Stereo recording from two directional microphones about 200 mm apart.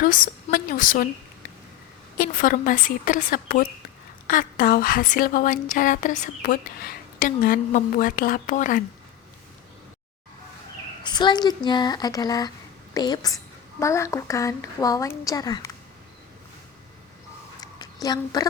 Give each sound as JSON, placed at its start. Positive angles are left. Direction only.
{"t": 0.0, "sound": "speech", "side_deg": 45}
{"t": 2.1, "sound": "speech", "side_deg": 45}
{"t": 11.0, "sound": "a woman's voice", "side_deg": 20}
{"t": 17.6, "sound": "a sound", "side_deg": 20}